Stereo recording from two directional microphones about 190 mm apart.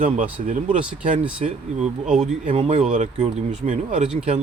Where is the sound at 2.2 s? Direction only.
40° right (ahead or behind).